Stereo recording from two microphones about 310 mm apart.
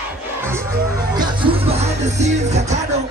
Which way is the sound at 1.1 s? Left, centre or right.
Centre.